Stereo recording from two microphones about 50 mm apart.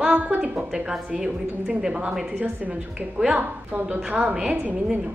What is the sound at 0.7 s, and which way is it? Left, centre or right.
A woman's voice, centre.